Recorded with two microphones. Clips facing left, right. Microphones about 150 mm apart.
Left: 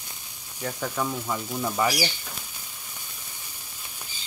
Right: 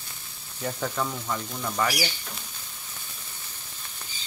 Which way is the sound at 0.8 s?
10° left (ahead or behind).